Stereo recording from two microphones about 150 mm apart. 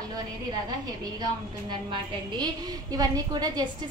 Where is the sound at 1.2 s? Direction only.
30° right (ahead or behind).